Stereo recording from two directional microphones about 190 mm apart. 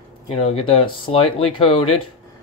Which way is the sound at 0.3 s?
35° left (ahead or behind).